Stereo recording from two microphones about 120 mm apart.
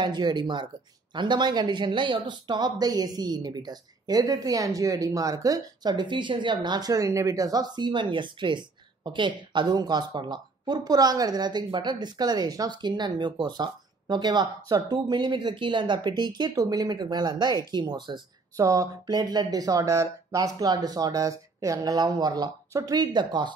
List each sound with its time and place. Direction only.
0.0 s speech: 35° right (ahead or behind)
18.6 s speech: 25° right (ahead or behind)